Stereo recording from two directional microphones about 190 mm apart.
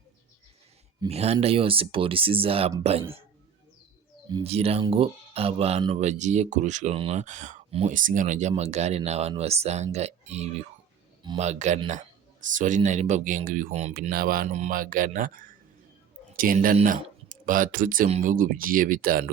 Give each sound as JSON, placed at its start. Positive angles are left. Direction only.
{"t": 1.0, "sound": "speech", "side_deg": -35}
{"t": 4.4, "sound": "speech", "side_deg": -30}
{"t": 16.4, "sound": "speech", "side_deg": -50}